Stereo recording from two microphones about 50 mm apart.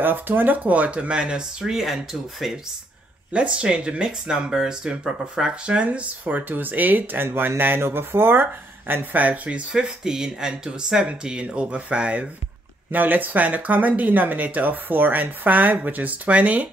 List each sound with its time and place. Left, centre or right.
0.0 s speech: right; by 1.7 s centre
1.7 s speech: centre
3.3 s speech: right
5.9 s speech: right
9.7 s speech: centre
12.9 s speech: right